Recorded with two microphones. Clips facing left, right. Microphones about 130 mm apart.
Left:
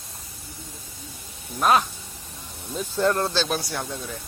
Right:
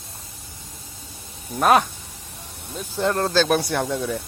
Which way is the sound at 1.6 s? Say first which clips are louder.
Right 3 dB; 55° right (ahead or behind).